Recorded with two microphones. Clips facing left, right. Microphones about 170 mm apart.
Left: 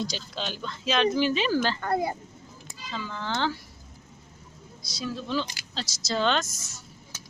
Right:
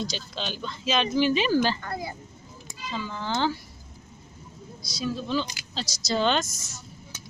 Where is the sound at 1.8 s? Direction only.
55° left (ahead or behind).